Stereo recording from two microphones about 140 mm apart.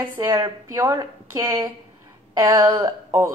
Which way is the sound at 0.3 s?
25° right (ahead or behind).